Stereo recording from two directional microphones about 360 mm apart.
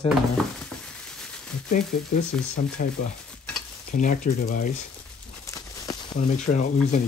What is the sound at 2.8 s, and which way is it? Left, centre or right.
Speech, left.